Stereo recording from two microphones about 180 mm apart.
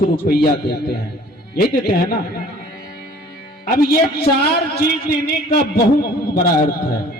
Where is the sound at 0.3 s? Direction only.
60° left (ahead or behind).